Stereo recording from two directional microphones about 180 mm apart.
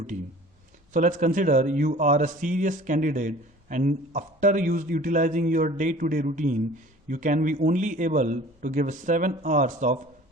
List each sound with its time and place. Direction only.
0.9 s a man's voice: 45° right (ahead or behind)